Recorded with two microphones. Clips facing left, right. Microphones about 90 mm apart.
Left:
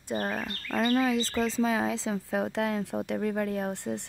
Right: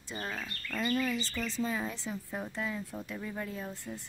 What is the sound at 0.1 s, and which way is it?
Speech, 55° left (ahead or behind).